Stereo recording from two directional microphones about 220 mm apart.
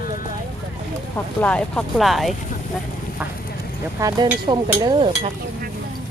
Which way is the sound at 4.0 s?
15° right (ahead or behind).